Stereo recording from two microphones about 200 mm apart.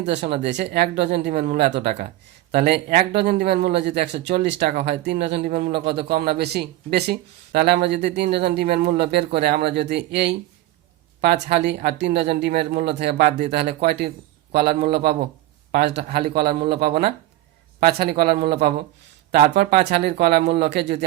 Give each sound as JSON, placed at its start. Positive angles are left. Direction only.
{"t": 0.0, "sound": "a man's voice", "side_deg": -60}
{"t": 5.5, "sound": "a man's voice", "side_deg": -45}